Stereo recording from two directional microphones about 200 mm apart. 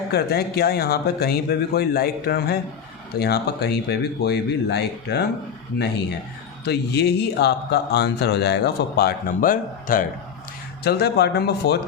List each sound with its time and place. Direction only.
0.1 s speech: 50° left (ahead or behind)
6.7 s speech: 55° left (ahead or behind)